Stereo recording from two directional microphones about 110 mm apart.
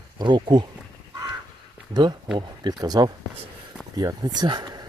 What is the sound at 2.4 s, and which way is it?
Speech, 40° right (ahead or behind).